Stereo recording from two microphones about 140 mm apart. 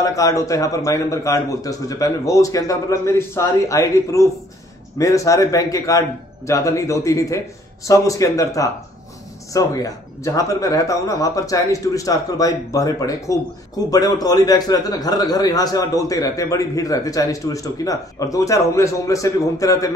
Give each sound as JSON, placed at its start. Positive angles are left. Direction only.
{"t": 0.0, "sound": "a man's voice", "side_deg": 25}